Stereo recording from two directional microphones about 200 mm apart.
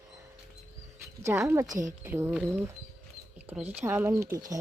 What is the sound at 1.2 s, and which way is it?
Speech, 10° right (ahead or behind).